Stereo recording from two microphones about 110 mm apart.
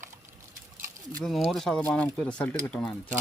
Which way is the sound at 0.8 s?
30° right (ahead or behind).